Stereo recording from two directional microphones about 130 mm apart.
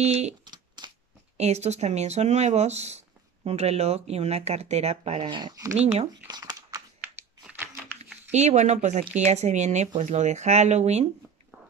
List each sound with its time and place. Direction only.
0.0 s speech: 55° right (ahead or behind)
0.5 s a sound: 35° right (ahead or behind)
1.3 s speech: 55° right (ahead or behind)
5.3 s speech: 30° right (ahead or behind)
6.2 s crumpling: 30° right (ahead or behind)
8.3 s speech: 60° right (ahead or behind)